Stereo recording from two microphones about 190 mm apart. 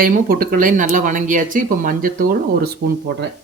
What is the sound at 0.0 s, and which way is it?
Speech, 50° right (ahead or behind).